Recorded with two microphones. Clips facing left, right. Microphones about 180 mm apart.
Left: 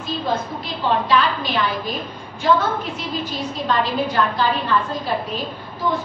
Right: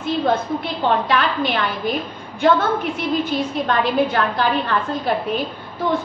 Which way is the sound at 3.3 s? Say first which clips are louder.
Right 3 dB; 55° right (ahead or behind).